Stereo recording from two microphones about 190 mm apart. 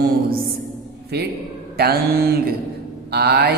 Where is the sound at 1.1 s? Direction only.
60° right (ahead or behind).